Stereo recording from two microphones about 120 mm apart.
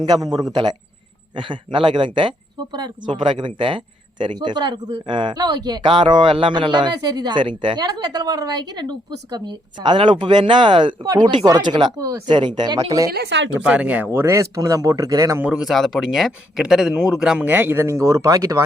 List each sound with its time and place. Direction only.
0.0 s speech: 35° right (ahead or behind)
13.7 s speech: 10° right (ahead or behind); by 15.4 s 25° right (ahead or behind)
15.4 s speech: 10° right (ahead or behind); by 18.6 s 30° right (ahead or behind)